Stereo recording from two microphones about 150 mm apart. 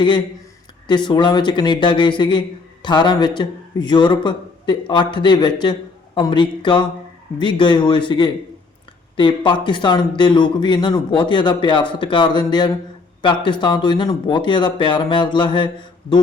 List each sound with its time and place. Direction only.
0.9 s speech: 30° left (ahead or behind)